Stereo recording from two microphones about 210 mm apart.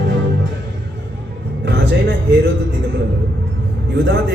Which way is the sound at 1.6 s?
55° right (ahead or behind).